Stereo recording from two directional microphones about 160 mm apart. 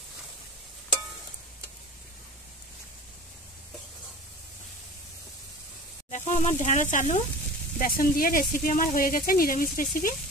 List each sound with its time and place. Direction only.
6.0 s speech: 45° left (ahead or behind)
7.8 s speech: 60° left (ahead or behind)